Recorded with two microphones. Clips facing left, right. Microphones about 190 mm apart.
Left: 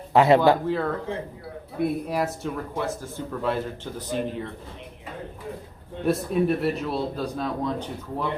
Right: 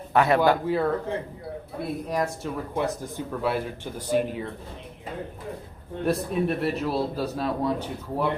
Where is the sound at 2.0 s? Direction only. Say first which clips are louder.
Left 1 dB; 5° left (ahead or behind).